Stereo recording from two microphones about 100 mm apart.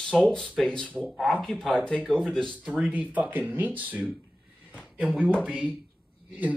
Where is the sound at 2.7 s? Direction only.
10° right (ahead or behind).